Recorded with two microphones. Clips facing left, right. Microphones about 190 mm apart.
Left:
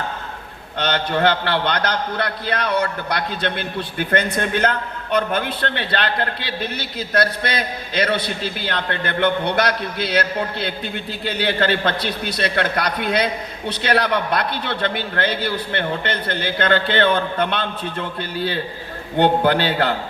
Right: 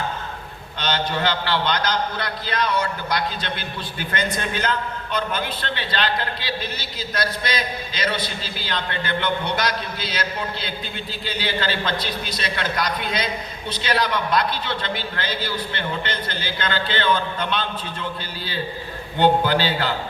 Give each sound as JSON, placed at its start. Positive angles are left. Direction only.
{"t": 0.8, "sound": "a man's voice", "side_deg": 60}